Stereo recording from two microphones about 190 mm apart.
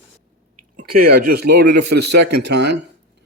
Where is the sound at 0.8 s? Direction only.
50° right (ahead or behind).